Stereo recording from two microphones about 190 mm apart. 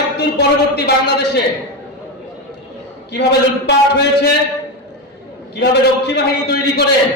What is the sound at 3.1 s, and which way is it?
Speech, 60° left (ahead or behind).